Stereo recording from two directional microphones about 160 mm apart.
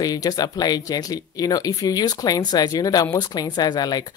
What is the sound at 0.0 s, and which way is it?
Speech, 25° left (ahead or behind).